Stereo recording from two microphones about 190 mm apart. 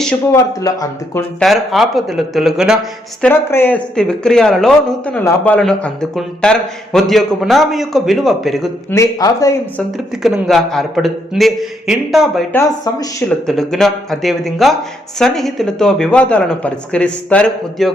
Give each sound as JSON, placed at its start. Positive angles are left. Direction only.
{"t": 0.3, "sound": "speech", "side_deg": 15}
{"t": 1.4, "sound": "a man's voice", "side_deg": 0}
{"t": 3.2, "sound": "a man's voice", "side_deg": 10}
{"t": 8.9, "sound": "speech", "side_deg": 15}
{"t": 10.2, "sound": "a man's voice", "side_deg": 0}
{"t": 12.5, "sound": "speech", "side_deg": 15}
{"t": 13.2, "sound": "a man's voice", "side_deg": 0}